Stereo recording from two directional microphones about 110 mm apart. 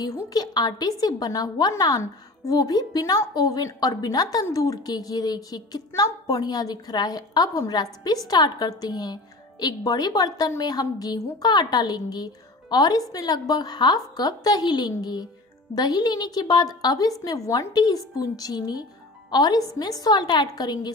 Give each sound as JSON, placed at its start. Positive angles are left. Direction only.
{"t": 0.3, "sound": "a woman's voice", "side_deg": 40}